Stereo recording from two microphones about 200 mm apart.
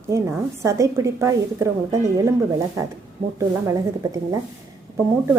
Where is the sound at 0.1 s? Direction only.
15° right (ahead or behind).